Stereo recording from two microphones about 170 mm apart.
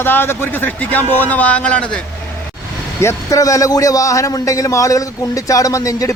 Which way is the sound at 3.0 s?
20° left (ahead or behind).